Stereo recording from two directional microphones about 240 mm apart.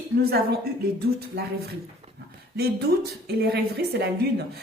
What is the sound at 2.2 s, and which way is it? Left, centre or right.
Speech, right.